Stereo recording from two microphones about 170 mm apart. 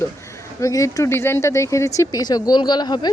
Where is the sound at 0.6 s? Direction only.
20° left (ahead or behind).